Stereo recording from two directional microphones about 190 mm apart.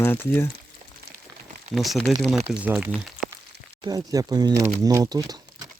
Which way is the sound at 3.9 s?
20° right (ahead or behind).